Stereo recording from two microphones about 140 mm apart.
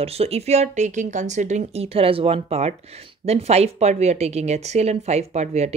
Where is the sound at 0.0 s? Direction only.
45° right (ahead or behind).